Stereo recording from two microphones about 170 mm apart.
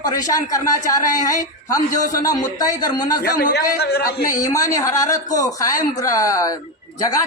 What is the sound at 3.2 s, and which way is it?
A man's voice, 70° left (ahead or behind).